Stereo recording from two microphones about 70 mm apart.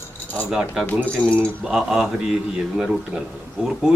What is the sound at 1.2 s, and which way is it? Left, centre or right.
Speech, centre.